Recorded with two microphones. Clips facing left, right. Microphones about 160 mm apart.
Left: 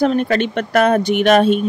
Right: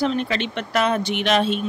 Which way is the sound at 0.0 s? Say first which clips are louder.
Left 7 dB; 50° left (ahead or behind).